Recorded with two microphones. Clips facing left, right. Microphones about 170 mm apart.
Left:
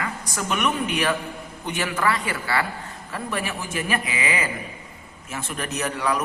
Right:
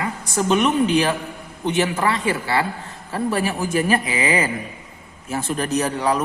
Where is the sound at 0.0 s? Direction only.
25° right (ahead or behind).